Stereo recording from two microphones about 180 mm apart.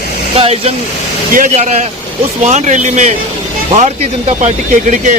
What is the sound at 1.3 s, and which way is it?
Speech, 50° right (ahead or behind).